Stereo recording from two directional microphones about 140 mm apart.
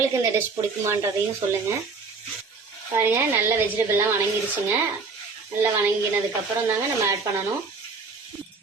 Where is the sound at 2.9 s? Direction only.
15° right (ahead or behind).